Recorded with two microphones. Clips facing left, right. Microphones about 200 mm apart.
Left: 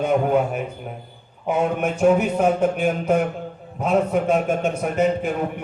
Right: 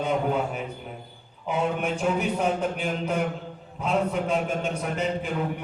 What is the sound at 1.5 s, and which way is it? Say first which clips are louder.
A man's voice: left 5 dB; 50° left (ahead or behind).